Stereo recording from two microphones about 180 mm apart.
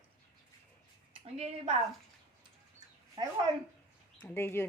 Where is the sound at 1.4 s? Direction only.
35° right (ahead or behind).